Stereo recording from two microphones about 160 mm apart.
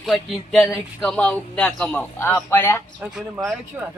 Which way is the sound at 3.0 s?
5° right (ahead or behind).